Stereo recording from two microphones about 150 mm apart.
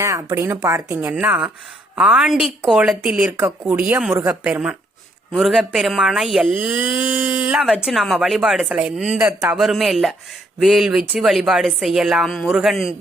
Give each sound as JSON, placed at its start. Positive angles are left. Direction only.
{"t": 0.0, "sound": "a woman's voice", "side_deg": -20}
{"t": 4.4, "sound": "speech", "side_deg": -5}
{"t": 9.6, "sound": "speech", "side_deg": 0}